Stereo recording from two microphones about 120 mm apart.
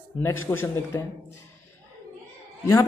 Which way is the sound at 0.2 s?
20° left (ahead or behind).